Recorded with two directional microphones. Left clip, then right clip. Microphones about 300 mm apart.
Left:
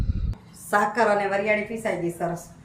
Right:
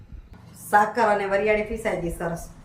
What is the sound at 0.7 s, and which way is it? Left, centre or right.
Speech, centre.